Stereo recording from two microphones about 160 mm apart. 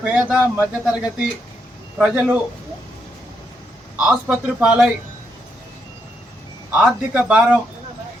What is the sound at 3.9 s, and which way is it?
Speech, 10° right (ahead or behind).